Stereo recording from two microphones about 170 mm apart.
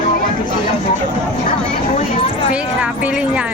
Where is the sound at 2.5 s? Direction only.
5° right (ahead or behind).